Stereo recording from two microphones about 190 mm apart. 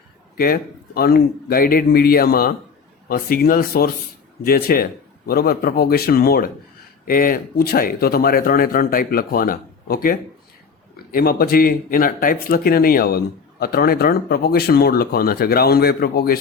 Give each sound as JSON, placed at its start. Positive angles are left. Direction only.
{"t": 0.3, "sound": "speech", "side_deg": 50}